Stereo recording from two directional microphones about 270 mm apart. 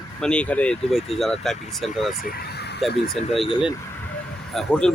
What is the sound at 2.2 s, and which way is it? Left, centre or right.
Vehicle, left.